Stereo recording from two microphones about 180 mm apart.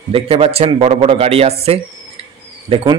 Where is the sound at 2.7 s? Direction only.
30° right (ahead or behind).